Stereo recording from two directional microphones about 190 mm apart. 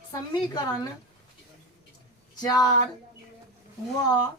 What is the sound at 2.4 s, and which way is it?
Speech, 20° left (ahead or behind).